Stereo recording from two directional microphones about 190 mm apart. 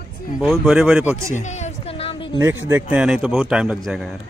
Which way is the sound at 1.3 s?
35° left (ahead or behind).